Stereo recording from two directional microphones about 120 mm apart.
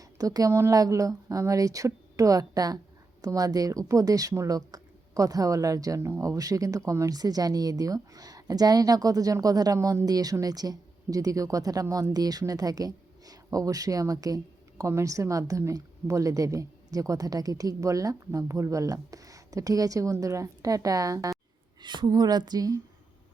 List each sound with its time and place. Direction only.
0.0 s speech: 30° right (ahead or behind)
21.8 s speech: 40° right (ahead or behind)